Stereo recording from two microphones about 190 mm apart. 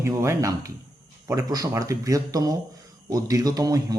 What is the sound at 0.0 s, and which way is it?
Speech, 15° right (ahead or behind).